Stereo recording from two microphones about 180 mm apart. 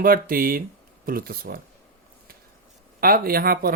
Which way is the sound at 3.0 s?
55° right (ahead or behind).